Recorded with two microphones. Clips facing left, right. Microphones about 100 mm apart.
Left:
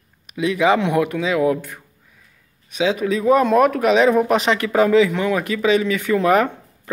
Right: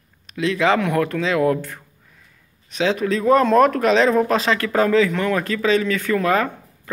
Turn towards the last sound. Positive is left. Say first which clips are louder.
# left 3 dB
turn(degrees=20)  # may be behind; listen again after turning